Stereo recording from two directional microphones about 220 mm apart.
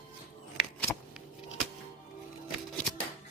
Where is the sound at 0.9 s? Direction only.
15° left (ahead or behind).